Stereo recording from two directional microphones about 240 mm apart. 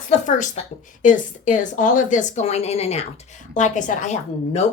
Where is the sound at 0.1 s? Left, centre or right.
Left.